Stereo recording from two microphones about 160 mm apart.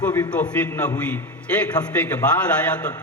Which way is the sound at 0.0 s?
10° left (ahead or behind).